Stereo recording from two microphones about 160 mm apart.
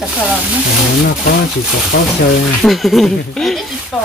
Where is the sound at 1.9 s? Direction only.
80° left.